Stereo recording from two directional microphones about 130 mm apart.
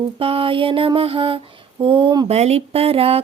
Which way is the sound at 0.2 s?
45° right (ahead or behind).